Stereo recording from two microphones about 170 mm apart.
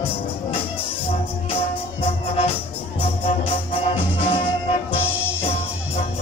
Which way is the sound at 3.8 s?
35° left (ahead or behind).